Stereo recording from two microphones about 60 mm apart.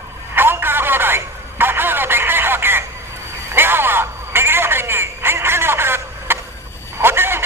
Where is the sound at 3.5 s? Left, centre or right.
Right.